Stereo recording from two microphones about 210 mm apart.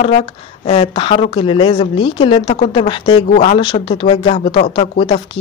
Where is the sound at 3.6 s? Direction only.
20° left (ahead or behind).